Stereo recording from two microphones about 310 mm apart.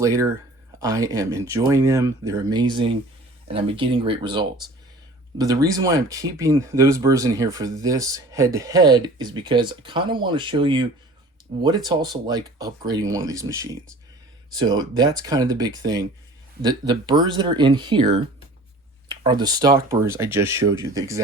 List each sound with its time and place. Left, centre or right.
0.0 s speech: centre